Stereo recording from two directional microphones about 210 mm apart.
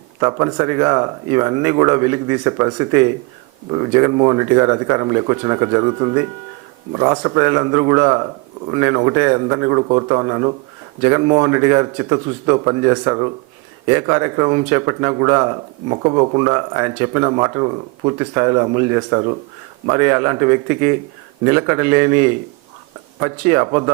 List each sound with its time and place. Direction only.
0.2 s speech: 20° right (ahead or behind)